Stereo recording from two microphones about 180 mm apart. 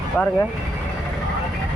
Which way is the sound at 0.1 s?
5° left (ahead or behind).